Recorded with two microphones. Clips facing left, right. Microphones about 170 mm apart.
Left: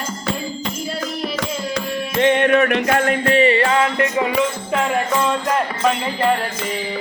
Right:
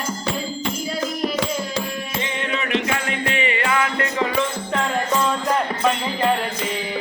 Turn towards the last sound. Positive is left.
turn(degrees=5)  # may be behind; listen again after turning